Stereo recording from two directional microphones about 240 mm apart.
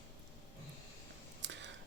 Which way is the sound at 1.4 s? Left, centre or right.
Right.